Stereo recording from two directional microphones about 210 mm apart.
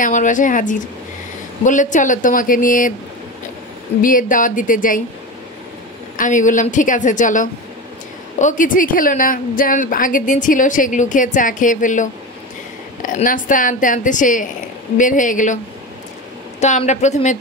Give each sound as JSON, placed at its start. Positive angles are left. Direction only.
{"t": 0.0, "sound": "a woman's voice", "side_deg": 35}
{"t": 4.0, "sound": "a woman's voice", "side_deg": 40}
{"t": 6.1, "sound": "a woman's voice", "side_deg": 35}